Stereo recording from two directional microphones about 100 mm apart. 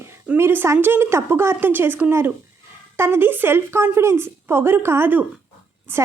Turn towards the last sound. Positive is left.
turn(degrees=-25)  # may be behind; listen again after turning